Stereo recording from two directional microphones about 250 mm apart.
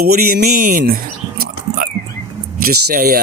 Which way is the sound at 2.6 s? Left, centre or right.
Right.